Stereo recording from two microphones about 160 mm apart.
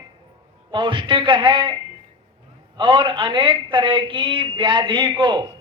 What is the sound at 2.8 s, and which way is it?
A man's voice, 30° right (ahead or behind).